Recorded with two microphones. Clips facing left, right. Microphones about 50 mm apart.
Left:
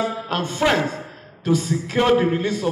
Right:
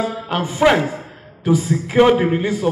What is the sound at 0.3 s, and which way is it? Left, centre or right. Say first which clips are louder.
A man's voice: right 6 dB; centre.